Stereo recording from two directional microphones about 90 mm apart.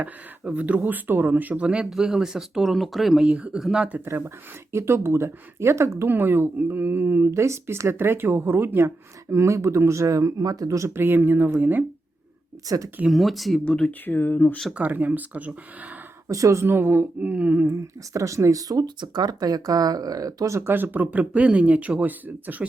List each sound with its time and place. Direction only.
0.0 s speech: 15° right (ahead or behind)
3.8 s speech: 20° right (ahead or behind)
12.6 s speech: 40° right (ahead or behind)
13.1 s speech: centre (ahead or behind)
13.7 s speech: 15° left (ahead or behind)
14.7 s speech: 15° right (ahead or behind)
16.3 s speech: 35° right (ahead or behind); by 17.7 s 15° right (ahead or behind)
17.7 s speech: 35° right (ahead or behind); by 22.6 s 20° right (ahead or behind)